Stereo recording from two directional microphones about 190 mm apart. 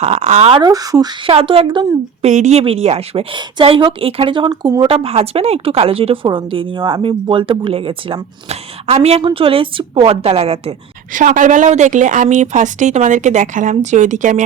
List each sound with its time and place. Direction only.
0.0 s speech: 35° right (ahead or behind)
0.6 s speech: 20° right (ahead or behind)
1.3 s speech: 30° right (ahead or behind)
2.2 s speech: 35° right (ahead or behind)